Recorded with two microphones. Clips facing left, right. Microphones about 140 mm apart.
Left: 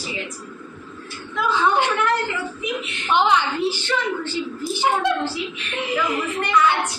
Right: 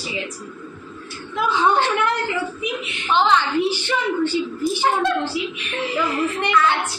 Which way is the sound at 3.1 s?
15° left (ahead or behind).